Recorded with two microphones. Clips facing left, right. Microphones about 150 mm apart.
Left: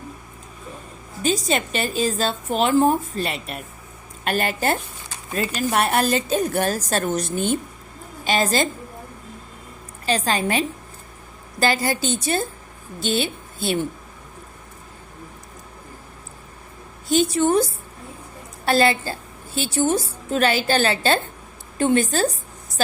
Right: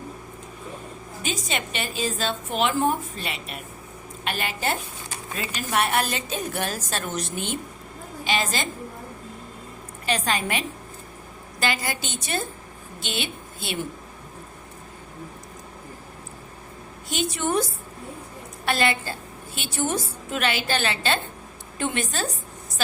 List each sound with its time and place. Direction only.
1.2 s a woman's voice: 35° left (ahead or behind)
10.1 s a woman's voice: 35° left (ahead or behind)
17.1 s a woman's voice: 35° left (ahead or behind)